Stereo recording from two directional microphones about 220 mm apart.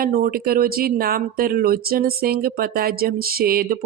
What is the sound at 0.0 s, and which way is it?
Speech, 40° right (ahead or behind).